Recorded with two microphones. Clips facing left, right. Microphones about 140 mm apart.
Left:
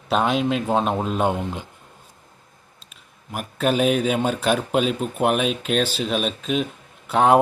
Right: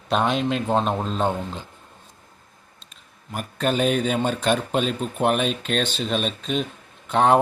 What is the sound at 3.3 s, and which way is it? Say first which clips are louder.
Speech: left 2 dB; 5° left (ahead or behind).